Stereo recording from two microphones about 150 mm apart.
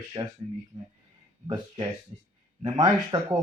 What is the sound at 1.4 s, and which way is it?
Speech, 30° right (ahead or behind).